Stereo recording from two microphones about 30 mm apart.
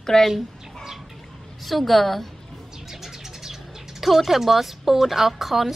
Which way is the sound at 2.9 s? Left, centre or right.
Centre.